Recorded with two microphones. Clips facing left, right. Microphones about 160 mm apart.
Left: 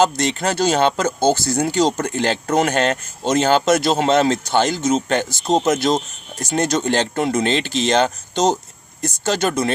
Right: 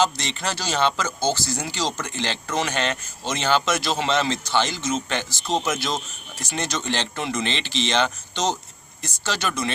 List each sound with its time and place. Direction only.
0.0 s speech: 50° left (ahead or behind)